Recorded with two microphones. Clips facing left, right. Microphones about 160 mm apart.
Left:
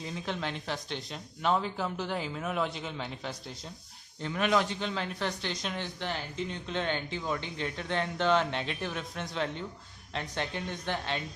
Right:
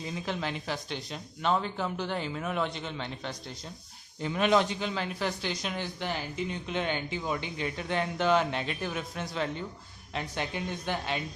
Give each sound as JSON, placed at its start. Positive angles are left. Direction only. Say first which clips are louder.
{"t": 0.0, "sound": "speech", "louder": "right 1 dB", "side_deg": 0}
{"t": 4.2, "sound": "speech", "louder": "right 3 dB", "side_deg": -20}
{"t": 4.8, "sound": "speech", "louder": "right 1 dB", "side_deg": -5}